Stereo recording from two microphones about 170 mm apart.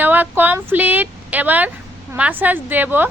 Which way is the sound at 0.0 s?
10° right (ahead or behind).